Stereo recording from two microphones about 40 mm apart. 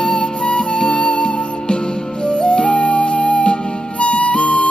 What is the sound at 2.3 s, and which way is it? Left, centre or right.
Flute, left.